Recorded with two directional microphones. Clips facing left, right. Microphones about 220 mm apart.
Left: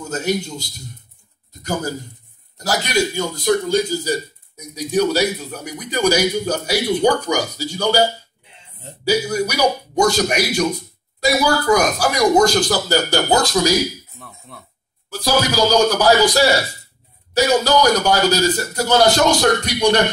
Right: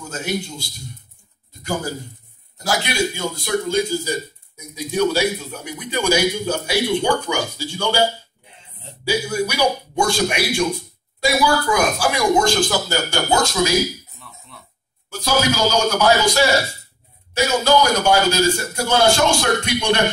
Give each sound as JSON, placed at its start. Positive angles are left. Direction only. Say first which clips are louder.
{"t": 0.1, "sound": "a man's voice", "louder": "left 4 dB", "side_deg": 40}
{"t": 2.5, "sound": "a man's voice", "louder": "left 3 dB", "side_deg": 40}
{"t": 15.1, "sound": "a man's voice", "louder": "left 2 dB", "side_deg": 35}